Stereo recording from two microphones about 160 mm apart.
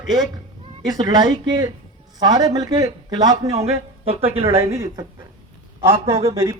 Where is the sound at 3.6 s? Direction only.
40° right (ahead or behind).